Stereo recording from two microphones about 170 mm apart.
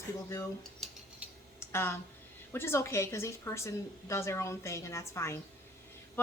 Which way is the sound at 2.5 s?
15° left (ahead or behind).